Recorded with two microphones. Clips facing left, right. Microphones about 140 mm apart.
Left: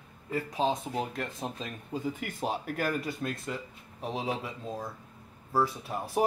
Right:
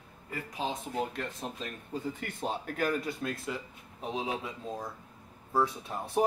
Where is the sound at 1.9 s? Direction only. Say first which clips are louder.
Left 3 dB; 10° left (ahead or behind).